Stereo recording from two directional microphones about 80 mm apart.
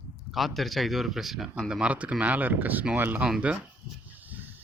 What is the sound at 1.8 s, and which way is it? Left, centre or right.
Speech, centre.